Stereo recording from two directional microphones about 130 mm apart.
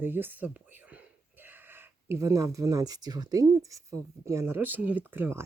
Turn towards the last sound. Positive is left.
turn(degrees=-15)  # may be behind; listen again after turning